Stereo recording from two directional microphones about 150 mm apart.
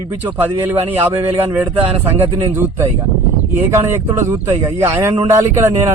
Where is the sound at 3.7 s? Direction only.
20° right (ahead or behind).